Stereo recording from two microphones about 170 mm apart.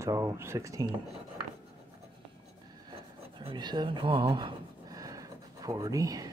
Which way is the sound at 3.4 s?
25° right (ahead or behind).